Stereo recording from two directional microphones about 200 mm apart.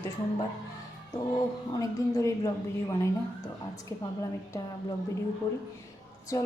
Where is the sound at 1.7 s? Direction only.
15° left (ahead or behind).